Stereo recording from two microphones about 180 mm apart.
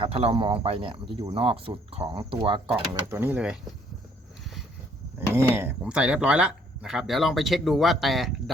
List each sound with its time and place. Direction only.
0.0 s speech: 30° right (ahead or behind)
3.1 s speech: 10° right (ahead or behind)
5.3 s speech: 15° right (ahead or behind)